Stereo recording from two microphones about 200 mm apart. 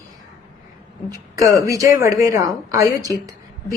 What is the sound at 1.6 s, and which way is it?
Speech, 15° right (ahead or behind).